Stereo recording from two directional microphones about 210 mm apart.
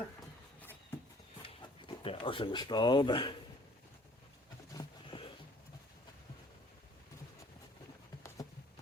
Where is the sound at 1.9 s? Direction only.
25° left (ahead or behind).